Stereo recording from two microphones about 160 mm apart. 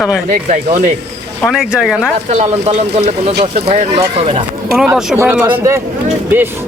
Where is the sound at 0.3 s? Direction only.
55° right (ahead or behind).